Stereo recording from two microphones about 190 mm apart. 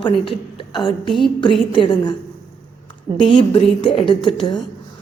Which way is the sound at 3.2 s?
25° left (ahead or behind).